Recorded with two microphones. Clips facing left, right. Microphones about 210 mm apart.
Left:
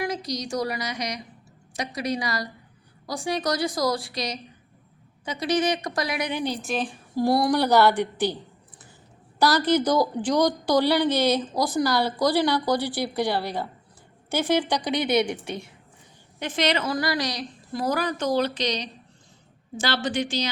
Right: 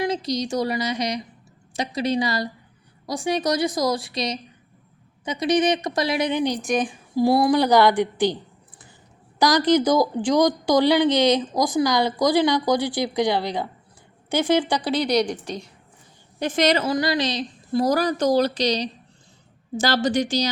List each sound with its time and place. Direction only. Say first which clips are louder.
0.0 s a woman's voice: right 5 dB; 25° right (ahead or behind)
9.4 s a woman's voice: right 3 dB; 15° right (ahead or behind)
14.8 s a woman's voice: right 3 dB; 20° left (ahead or behind)
16.4 s a woman's voice: right 5 dB; 45° right (ahead or behind)
16.8 s a woman's voice: right 4 dB; 25° right (ahead or behind); by 20.5 s 40° right (ahead or behind)